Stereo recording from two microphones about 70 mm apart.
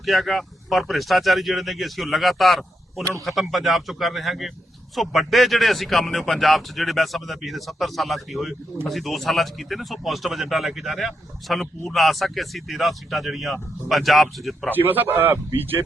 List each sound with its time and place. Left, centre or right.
0.0 s speech: centre
14.7 s a man's voice: right